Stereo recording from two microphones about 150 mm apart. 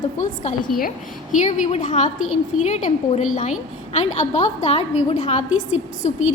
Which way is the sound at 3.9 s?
50° left (ahead or behind).